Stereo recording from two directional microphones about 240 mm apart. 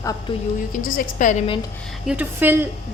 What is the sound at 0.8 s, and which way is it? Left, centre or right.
Speech, left.